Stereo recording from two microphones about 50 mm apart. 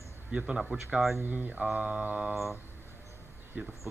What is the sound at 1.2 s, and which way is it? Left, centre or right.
Speech, right.